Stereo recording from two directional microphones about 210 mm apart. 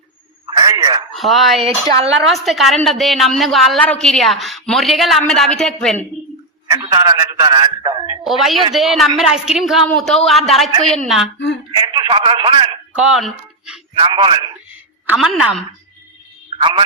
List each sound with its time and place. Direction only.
0.5 s a sound: 15° right (ahead or behind)
1.1 s speech: centre (ahead or behind)
1.6 s a man's voice: 25° right (ahead or behind)
2.2 s a woman's voice: centre (ahead or behind)
6.7 s a man's voice: 20° right (ahead or behind)
8.2 s a woman's voice: centre (ahead or behind)
11.7 s a man's voice: 20° right (ahead or behind)
13.0 s speech: centre (ahead or behind)
13.9 s a man's voice: 20° right (ahead or behind)
14.7 s a sound: 5° right (ahead or behind)
16.6 s a man's voice: 25° right (ahead or behind)